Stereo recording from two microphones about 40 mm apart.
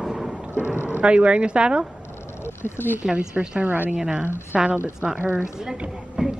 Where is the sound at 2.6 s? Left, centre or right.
Left.